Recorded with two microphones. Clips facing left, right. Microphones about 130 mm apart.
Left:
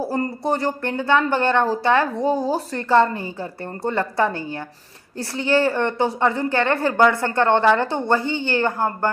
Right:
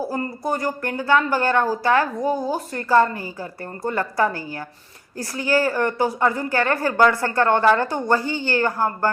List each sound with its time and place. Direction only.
0.0 s a woman's voice: 30° left (ahead or behind)